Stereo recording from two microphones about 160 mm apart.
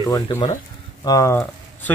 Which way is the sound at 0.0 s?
25° left (ahead or behind).